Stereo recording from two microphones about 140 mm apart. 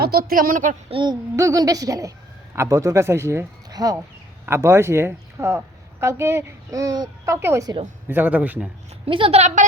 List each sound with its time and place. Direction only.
0.0 s speech: 90° right; by 0.8 s 70° right (ahead or behind)
0.9 s a woman's voice: 35° right (ahead or behind)
1.4 s a woman's voice: 25° right (ahead or behind)
9.0 s a woman's voice: 40° right (ahead or behind)